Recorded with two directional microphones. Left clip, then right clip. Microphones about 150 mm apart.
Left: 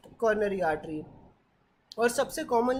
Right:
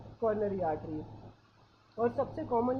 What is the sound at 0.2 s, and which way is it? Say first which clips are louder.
Speech: left 5 dB; 40° left (ahead or behind).